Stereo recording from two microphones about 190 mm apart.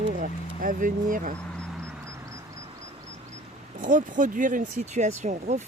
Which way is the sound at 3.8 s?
45° right (ahead or behind).